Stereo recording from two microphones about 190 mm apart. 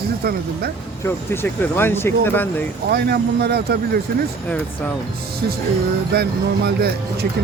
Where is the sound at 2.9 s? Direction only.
60° right (ahead or behind).